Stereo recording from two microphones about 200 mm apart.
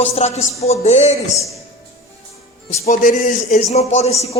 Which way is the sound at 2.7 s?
35° left (ahead or behind).